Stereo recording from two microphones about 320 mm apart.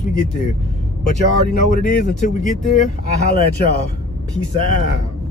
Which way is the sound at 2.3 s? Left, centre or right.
Left.